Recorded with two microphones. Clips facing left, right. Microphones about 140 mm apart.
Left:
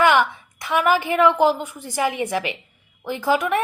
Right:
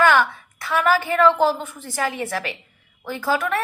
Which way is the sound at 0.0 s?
15° left (ahead or behind).